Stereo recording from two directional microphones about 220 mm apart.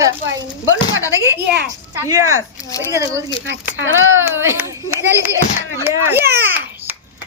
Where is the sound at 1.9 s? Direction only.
15° right (ahead or behind).